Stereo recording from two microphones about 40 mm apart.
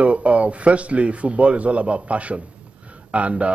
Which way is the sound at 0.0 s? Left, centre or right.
Right.